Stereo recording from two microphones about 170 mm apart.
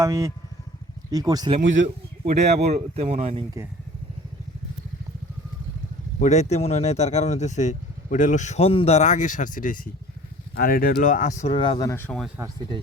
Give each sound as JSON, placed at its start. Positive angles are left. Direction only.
{"t": 0.0, "sound": "speech", "side_deg": -20}
{"t": 1.6, "sound": "speech", "side_deg": -90}
{"t": 2.6, "sound": "speech", "side_deg": -40}
{"t": 6.1, "sound": "speech", "side_deg": 40}
{"t": 11.5, "sound": "speech", "side_deg": 25}